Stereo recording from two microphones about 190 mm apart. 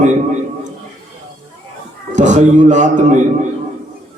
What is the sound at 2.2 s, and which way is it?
Speech, 40° right (ahead or behind).